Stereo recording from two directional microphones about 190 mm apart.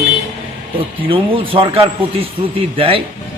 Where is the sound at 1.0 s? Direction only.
30° right (ahead or behind).